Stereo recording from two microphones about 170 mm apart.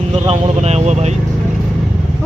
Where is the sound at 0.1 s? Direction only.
40° right (ahead or behind).